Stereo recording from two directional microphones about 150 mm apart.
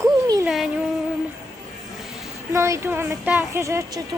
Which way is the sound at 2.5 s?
20° right (ahead or behind).